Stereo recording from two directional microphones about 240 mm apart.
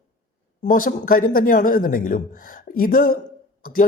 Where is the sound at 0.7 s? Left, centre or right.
Left.